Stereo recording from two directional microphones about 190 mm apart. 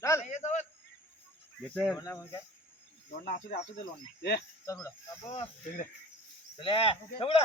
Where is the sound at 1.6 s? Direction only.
10° left (ahead or behind).